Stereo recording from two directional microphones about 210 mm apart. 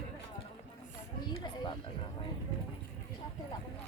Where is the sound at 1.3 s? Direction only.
20° left (ahead or behind).